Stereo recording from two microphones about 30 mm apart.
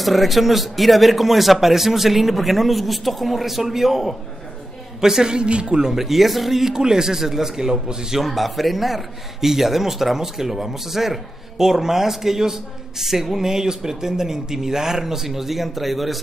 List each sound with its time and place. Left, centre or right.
0.0 s a man's voice: centre
5.0 s speech: right
5.9 s a man's voice: centre
6.7 s speech: right
8.3 s a man's voice: centre